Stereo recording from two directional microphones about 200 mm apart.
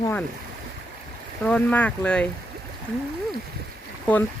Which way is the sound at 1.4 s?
5° left (ahead or behind).